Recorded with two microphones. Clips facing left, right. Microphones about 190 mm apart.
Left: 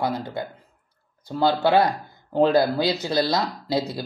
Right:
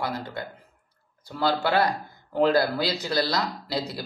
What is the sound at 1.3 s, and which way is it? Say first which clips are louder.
Speech: left 5 dB; 25° left (ahead or behind).